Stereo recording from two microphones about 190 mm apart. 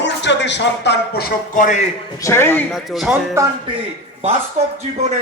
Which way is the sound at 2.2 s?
15° left (ahead or behind).